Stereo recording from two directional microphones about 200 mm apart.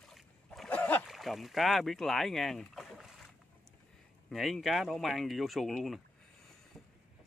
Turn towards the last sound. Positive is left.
turn(degrees=0)  # may be behind; listen again after turning